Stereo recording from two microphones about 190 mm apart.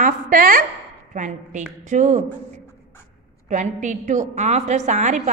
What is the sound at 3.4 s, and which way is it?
A woman's voice, 40° right (ahead or behind).